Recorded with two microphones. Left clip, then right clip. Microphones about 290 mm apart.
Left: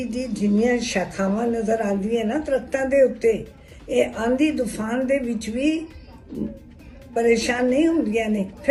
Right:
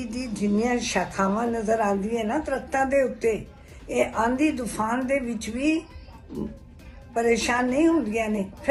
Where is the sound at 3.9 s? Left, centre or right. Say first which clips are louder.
Left 3 dB; right.